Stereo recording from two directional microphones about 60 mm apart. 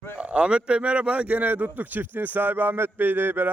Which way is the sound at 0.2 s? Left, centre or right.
Centre.